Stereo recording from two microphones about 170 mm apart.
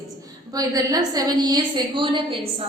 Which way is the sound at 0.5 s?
20° right (ahead or behind).